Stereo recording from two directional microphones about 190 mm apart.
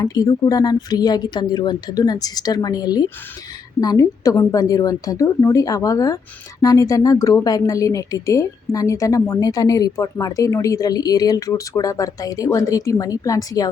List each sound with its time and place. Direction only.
0.0 s speech: 20° left (ahead or behind)